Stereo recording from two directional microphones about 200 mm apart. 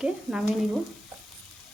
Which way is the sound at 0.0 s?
5° right (ahead or behind).